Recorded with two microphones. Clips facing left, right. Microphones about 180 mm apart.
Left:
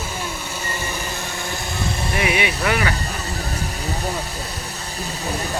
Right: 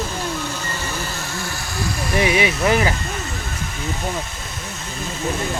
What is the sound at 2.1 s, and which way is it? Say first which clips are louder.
Speech: right 4 dB; 30° right (ahead or behind).